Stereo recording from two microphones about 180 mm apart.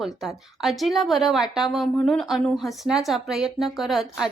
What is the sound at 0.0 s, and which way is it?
A woman's voice, centre (ahead or behind).